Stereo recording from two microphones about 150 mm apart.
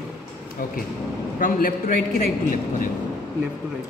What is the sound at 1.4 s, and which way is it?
Speech, 65° left (ahead or behind).